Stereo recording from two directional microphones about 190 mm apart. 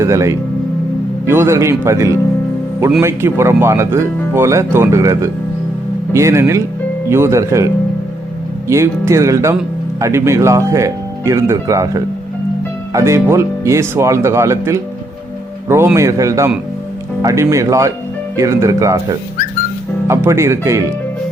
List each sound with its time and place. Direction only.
0.0 s speech: 15° right (ahead or behind)